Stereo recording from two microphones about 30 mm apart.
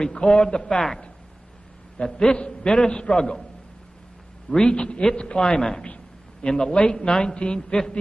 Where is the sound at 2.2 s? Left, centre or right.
Left.